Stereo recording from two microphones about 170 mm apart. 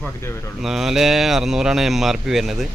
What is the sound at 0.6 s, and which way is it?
Speech, centre (ahead or behind).